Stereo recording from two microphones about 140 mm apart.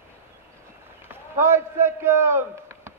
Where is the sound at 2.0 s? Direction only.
15° right (ahead or behind).